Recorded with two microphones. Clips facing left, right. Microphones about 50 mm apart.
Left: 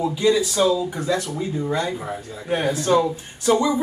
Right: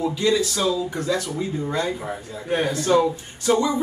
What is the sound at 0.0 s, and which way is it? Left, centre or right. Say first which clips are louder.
Speech: left 2 dB; centre.